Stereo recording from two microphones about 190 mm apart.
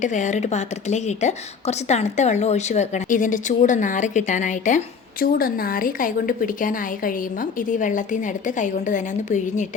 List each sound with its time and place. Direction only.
0.0 s a woman's voice: 40° left (ahead or behind)